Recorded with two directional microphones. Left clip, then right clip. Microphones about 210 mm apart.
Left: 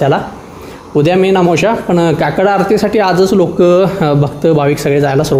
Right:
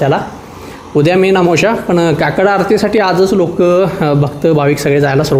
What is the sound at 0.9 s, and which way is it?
A man's voice, 5° right (ahead or behind).